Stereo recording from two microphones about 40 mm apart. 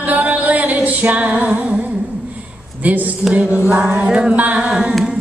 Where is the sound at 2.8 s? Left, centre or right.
Right.